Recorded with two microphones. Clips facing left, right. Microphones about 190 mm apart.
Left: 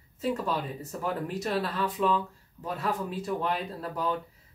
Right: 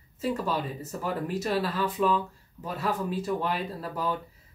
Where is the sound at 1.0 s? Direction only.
5° right (ahead or behind).